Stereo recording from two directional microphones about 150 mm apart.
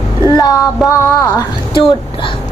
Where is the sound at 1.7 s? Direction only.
35° left (ahead or behind).